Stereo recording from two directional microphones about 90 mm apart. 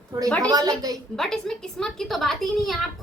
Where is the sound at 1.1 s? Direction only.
5° left (ahead or behind).